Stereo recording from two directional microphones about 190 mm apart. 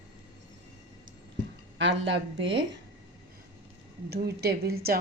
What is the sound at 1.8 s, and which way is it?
Speech, 75° right (ahead or behind).